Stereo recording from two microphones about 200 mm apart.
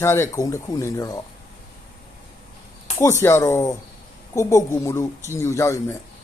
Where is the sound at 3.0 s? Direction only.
15° left (ahead or behind).